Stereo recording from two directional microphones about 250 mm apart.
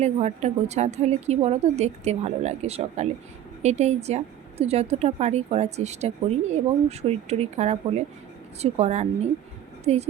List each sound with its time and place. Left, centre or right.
0.0 s a woman's voice: right